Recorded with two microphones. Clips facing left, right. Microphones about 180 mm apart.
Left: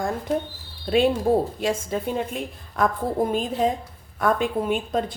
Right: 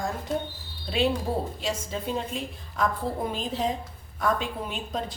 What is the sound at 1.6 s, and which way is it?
A woman's voice, 55° left (ahead or behind).